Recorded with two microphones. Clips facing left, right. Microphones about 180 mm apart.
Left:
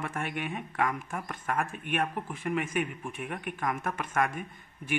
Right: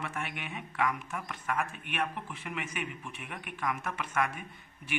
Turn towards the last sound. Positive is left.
turn(degrees=50)  # may be behind; listen again after turning